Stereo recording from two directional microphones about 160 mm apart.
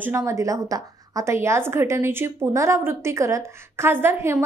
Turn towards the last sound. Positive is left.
turn(degrees=-15)  # may be behind; listen again after turning